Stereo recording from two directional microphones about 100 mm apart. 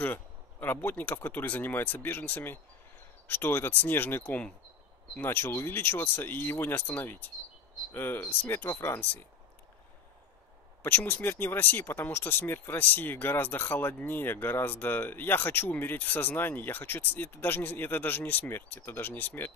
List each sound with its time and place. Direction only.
0.0 s speech: 20° left (ahead or behind)
10.8 s speech: 20° left (ahead or behind)